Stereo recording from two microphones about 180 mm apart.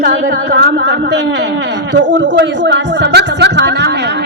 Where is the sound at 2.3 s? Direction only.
70° right (ahead or behind).